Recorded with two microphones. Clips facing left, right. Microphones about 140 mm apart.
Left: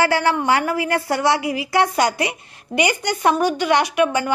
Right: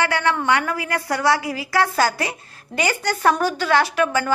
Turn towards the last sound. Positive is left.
turn(degrees=20)  # may be behind; listen again after turning